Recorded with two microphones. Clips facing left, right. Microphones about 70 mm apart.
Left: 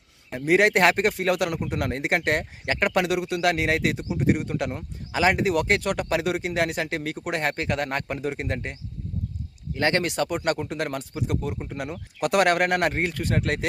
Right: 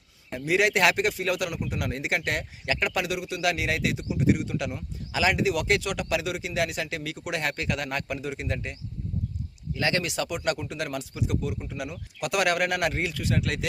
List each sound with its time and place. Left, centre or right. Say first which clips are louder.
0.3 s speech: left 4 dB; left